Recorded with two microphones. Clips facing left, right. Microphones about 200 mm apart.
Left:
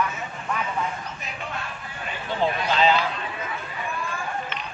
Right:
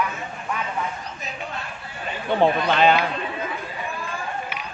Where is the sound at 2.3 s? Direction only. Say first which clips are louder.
Right 5 dB; 60° right (ahead or behind).